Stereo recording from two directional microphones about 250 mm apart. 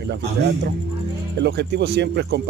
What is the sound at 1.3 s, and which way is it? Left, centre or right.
Speech, right.